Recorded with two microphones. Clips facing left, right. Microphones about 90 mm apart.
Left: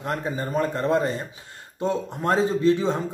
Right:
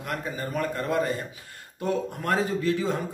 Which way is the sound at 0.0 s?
25° left (ahead or behind).